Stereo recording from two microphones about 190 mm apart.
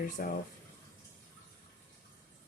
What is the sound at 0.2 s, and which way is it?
Speech, 45° left (ahead or behind).